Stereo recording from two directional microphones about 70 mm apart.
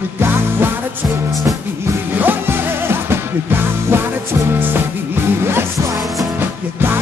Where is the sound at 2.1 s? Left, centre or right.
Right.